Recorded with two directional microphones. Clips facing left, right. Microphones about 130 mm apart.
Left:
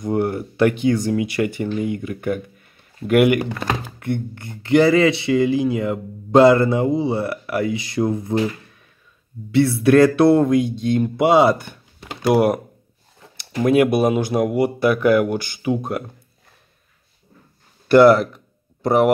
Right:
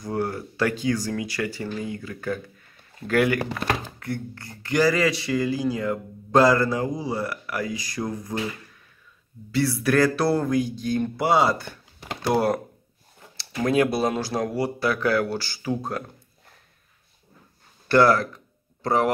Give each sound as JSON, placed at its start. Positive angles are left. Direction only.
{"t": 0.0, "sound": "speech", "side_deg": 20}
{"t": 9.5, "sound": "speech", "side_deg": 25}
{"t": 17.8, "sound": "a sound", "side_deg": 20}